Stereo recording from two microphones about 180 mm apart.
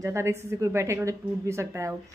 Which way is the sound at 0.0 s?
15° right (ahead or behind).